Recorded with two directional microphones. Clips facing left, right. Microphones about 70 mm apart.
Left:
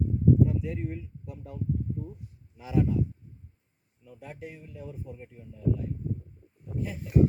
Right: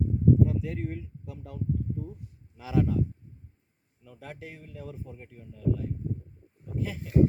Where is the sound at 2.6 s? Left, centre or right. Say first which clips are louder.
Even; right.